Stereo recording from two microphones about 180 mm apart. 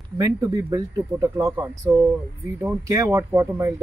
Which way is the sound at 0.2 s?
20° right (ahead or behind).